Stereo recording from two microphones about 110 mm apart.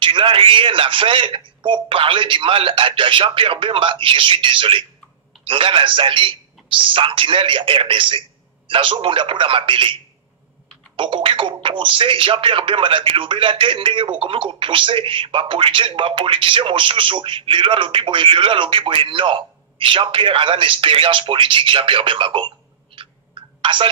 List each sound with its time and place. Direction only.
0.0 s a man's voice: 50° right (ahead or behind)
11.0 s a man's voice: 50° right (ahead or behind)
22.9 s a sound: 55° right (ahead or behind)